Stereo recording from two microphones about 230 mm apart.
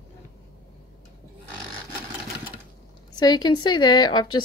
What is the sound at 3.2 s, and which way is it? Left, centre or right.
A woman's voice, centre.